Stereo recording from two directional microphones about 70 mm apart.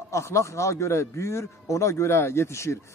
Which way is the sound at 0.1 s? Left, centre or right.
Left.